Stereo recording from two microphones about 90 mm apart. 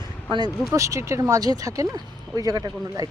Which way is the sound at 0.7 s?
35° right (ahead or behind).